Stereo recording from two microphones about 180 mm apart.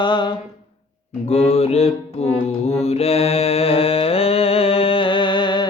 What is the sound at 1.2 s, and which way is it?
Mantra, 35° left (ahead or behind).